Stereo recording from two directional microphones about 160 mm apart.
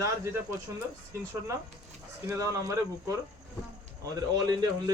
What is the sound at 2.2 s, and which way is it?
A man's voice, 20° right (ahead or behind).